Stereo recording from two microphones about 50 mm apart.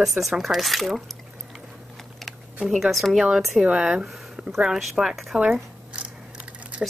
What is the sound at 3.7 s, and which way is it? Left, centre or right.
Speech, centre.